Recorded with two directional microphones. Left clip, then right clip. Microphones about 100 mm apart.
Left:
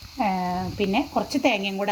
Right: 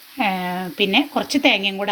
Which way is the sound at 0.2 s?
25° right (ahead or behind).